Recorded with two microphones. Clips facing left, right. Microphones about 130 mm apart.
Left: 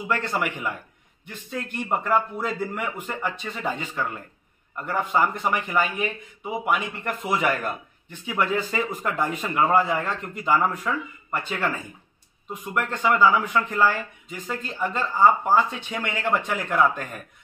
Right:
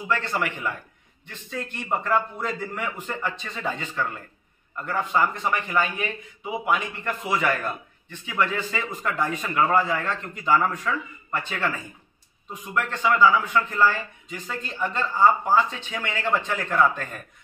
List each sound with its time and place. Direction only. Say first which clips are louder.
0.0 s speech: even; 10° left (ahead or behind)
7.1 s a man's voice: even; 15° left (ahead or behind)